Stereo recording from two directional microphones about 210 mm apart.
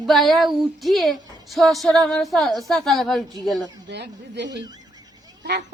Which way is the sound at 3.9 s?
55° right (ahead or behind).